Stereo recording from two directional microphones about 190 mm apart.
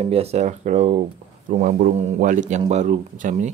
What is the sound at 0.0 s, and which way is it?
A man's voice, 30° right (ahead or behind).